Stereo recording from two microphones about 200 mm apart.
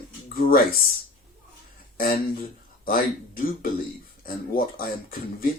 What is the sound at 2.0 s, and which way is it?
Speech, 45° left (ahead or behind).